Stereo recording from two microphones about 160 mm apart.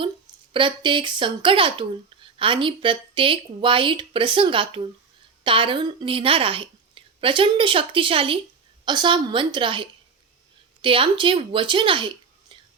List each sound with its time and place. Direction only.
0.5 s a woman's voice: 30° right (ahead or behind)